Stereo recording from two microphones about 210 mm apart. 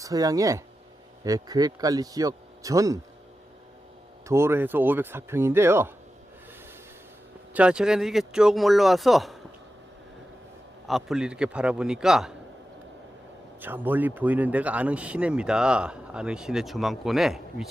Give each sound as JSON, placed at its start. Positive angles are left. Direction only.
{"t": 0.0, "sound": "a man's voice", "side_deg": -15}
{"t": 4.3, "sound": "a man's voice", "side_deg": -10}
{"t": 7.5, "sound": "speech", "side_deg": -5}
{"t": 10.8, "sound": "speech", "side_deg": 0}
{"t": 13.6, "sound": "speech", "side_deg": -10}